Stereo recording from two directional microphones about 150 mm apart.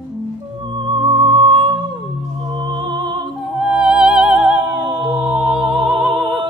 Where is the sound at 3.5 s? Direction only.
5° right (ahead or behind).